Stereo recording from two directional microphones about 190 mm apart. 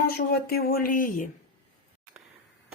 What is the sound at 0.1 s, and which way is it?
Speech, 55° left (ahead or behind).